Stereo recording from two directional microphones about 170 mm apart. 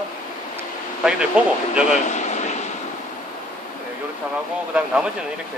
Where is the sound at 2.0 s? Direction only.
45° left (ahead or behind).